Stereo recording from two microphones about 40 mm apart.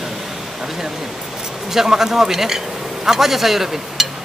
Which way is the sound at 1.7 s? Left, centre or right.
Centre.